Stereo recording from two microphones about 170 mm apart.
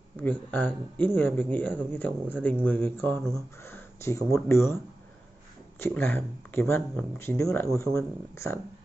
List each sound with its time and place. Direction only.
0.2 s speech: 10° left (ahead or behind)